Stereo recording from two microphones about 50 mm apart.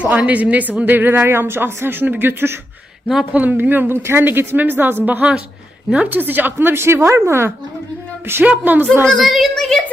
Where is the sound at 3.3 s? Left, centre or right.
Right.